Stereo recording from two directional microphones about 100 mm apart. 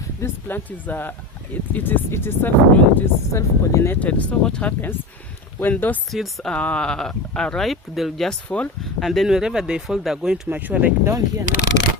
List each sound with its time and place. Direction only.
0.2 s speech: 20° left (ahead or behind)
4.0 s speech: 15° left (ahead or behind)
6.1 s speech: centre (ahead or behind)
6.5 s speech: 10° left (ahead or behind)
8.4 s speech: 15° left (ahead or behind)
8.8 s speech: centre (ahead or behind)
10.5 s speech: 15° right (ahead or behind)
11.0 s speech: 30° right (ahead or behind)